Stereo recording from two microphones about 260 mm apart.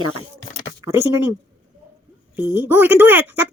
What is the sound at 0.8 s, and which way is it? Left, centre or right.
Speech, centre.